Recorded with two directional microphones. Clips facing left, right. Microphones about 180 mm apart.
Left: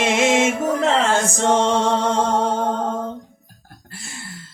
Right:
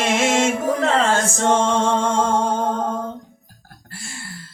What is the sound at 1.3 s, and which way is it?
Mantra, 15° left (ahead or behind).